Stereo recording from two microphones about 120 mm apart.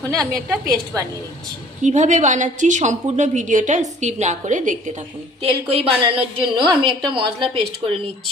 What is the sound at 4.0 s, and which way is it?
Speech, 75° right (ahead or behind).